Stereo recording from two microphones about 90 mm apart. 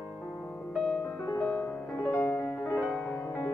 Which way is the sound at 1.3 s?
35° left (ahead or behind).